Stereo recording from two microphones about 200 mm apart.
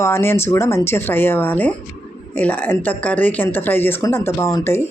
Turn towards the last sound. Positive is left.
turn(degrees=15)  # may be behind; listen again after turning